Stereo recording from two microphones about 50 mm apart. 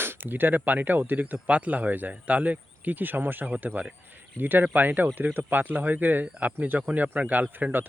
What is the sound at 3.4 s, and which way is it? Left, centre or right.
Speech, right.